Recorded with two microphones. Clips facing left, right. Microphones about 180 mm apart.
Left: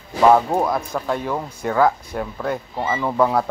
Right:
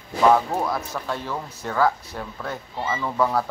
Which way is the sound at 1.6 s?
20° left (ahead or behind).